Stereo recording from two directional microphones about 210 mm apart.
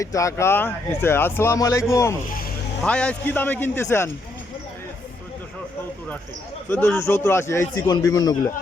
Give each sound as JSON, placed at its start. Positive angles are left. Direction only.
{"t": 0.0, "sound": "speech", "side_deg": 15}
{"t": 6.7, "sound": "speech", "side_deg": 10}